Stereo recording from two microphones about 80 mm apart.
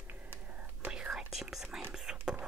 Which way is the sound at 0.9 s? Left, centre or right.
Centre.